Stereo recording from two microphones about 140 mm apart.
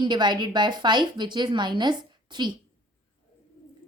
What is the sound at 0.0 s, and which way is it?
Speech, 30° right (ahead or behind).